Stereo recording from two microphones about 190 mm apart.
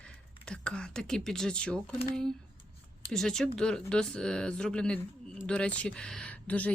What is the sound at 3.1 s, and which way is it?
A woman's voice, centre (ahead or behind).